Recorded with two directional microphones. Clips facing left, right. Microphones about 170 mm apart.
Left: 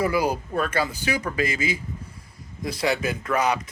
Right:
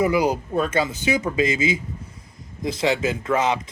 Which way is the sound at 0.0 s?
20° right (ahead or behind).